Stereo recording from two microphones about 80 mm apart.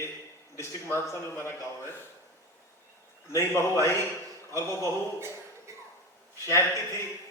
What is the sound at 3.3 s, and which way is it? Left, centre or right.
Speech, left.